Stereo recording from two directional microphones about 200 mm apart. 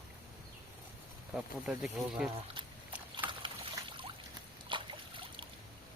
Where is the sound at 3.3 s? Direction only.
25° right (ahead or behind).